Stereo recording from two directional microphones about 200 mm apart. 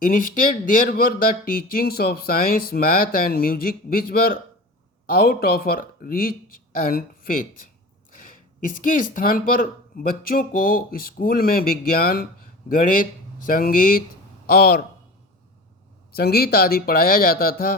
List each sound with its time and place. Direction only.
0.0 s a woman's voice: 45° left (ahead or behind)
8.8 s a man's voice: 40° left (ahead or behind)
16.1 s speech: 50° left (ahead or behind)